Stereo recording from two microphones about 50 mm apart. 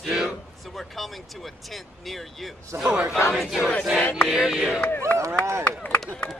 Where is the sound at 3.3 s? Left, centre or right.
Centre.